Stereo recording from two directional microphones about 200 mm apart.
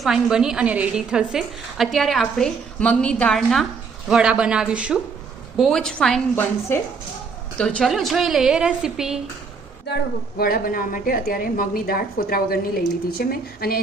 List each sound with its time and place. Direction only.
0.0 s a woman's voice: centre (ahead or behind)
9.8 s a woman's voice: 55° left (ahead or behind)